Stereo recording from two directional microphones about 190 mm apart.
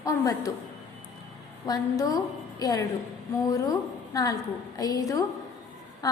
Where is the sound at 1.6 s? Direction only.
20° left (ahead or behind).